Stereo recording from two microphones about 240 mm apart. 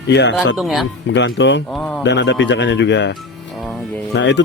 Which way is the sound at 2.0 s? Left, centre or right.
Left.